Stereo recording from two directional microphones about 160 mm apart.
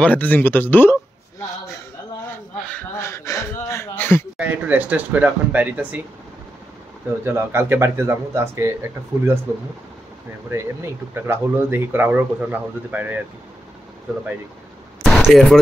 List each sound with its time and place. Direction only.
0.0 s speech: 10° left (ahead or behind)
2.7 s speech: 15° left (ahead or behind)
3.7 s a sound: 15° left (ahead or behind)
4.4 s speech: 10° right (ahead or behind)
7.2 s speech: 15° right (ahead or behind)
15.0 s speech: centre (ahead or behind)